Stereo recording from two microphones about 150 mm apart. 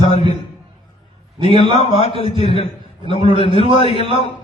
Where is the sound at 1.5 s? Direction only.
40° left (ahead or behind).